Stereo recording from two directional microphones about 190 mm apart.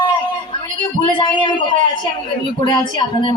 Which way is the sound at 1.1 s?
25° left (ahead or behind).